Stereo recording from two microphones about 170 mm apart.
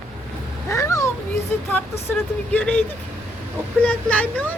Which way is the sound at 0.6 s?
20° left (ahead or behind).